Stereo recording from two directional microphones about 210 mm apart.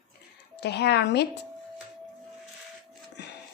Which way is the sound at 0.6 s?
50° left (ahead or behind).